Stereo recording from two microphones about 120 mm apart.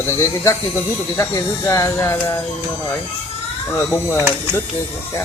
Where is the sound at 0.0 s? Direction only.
25° left (ahead or behind).